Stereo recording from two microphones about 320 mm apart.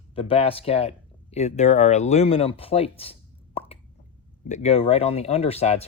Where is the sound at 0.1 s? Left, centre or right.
Centre.